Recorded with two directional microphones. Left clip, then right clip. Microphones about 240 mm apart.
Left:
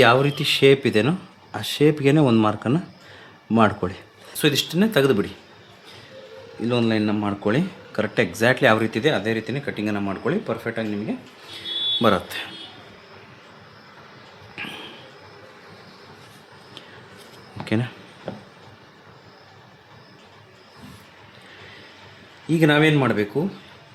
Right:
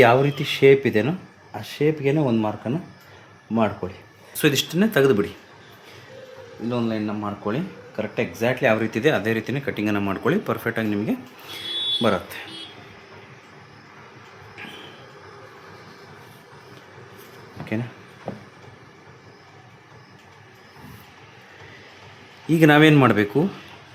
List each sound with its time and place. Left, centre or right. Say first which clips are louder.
0.0 s speech: even; centre; by 3.9 s left
4.4 s speech: even; centre
6.7 s speech: left 4 dB; left
8.9 s speech: right 1 dB; centre
12.0 s speech: left 3 dB; centre
22.4 s speech: right 3 dB; centre